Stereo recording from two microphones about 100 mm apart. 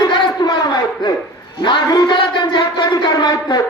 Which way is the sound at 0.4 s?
45° left (ahead or behind).